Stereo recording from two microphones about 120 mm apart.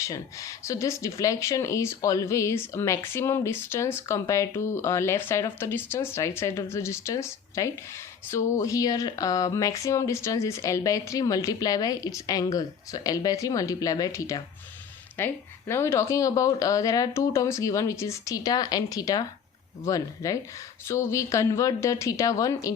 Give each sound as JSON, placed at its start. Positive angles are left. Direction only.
{"t": 0.0, "sound": "speech", "side_deg": 25}